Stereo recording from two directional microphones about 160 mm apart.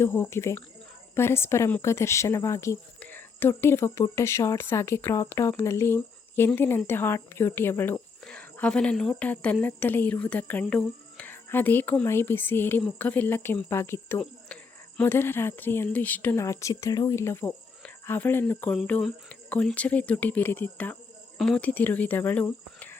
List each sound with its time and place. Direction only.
0.0 s speech: 15° left (ahead or behind)